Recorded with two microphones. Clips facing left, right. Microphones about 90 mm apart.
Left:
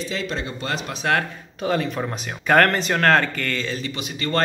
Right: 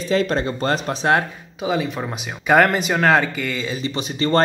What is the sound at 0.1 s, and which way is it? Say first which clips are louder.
Speech: right 8 dB; 45° right (ahead or behind).